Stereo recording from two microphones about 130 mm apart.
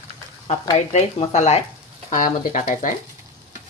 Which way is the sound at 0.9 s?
55° left (ahead or behind).